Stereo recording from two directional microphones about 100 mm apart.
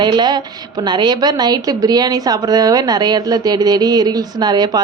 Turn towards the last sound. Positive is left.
turn(degrees=-45)  # may be behind; listen again after turning